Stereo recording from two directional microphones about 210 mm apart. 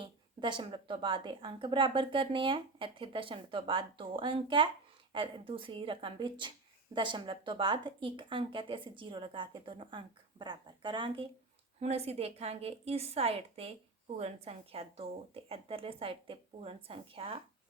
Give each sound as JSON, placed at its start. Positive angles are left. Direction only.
{"t": 0.0, "sound": "a woman's voice", "side_deg": -20}